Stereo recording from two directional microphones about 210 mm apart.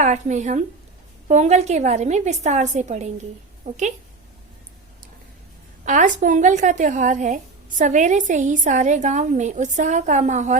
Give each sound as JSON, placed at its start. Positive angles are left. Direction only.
{"t": 0.0, "sound": "a woman's voice", "side_deg": -35}
{"t": 5.8, "sound": "a woman's voice", "side_deg": -35}